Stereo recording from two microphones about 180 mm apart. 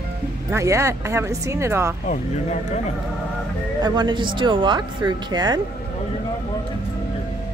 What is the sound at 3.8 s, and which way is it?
Speech, 25° right (ahead or behind).